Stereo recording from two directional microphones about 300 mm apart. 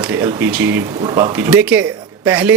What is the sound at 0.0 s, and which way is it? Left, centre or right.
Speech, centre.